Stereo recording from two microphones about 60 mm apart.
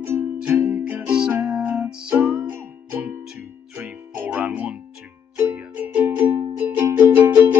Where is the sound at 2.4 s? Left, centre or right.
Right.